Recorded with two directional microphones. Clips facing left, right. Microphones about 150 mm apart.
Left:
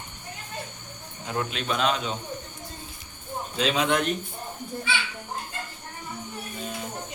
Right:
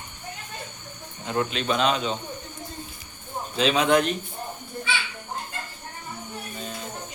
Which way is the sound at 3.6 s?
Centre (ahead or behind).